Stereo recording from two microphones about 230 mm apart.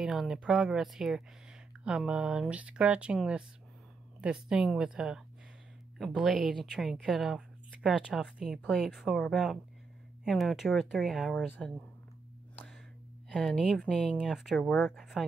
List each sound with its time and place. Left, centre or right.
0.0 s a woman's voice: centre
13.3 s a woman's voice: centre